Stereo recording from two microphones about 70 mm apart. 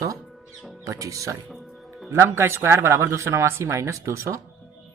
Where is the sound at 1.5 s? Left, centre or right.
Centre.